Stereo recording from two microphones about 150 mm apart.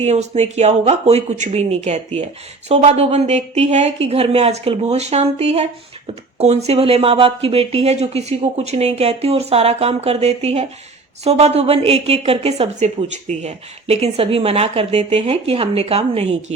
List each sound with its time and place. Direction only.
0.0 s a woman's voice: 45° right (ahead or behind)